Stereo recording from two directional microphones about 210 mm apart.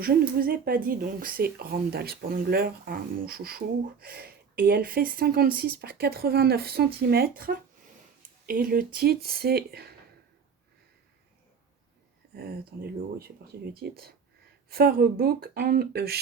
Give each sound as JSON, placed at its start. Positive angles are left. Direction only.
{"t": 0.0, "sound": "speech", "side_deg": -45}
{"t": 12.4, "sound": "speech", "side_deg": -45}